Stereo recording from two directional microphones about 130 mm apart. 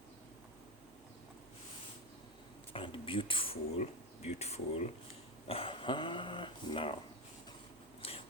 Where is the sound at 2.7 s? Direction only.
40° left (ahead or behind).